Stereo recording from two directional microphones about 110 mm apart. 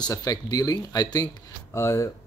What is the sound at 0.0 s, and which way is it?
Speech, 30° left (ahead or behind).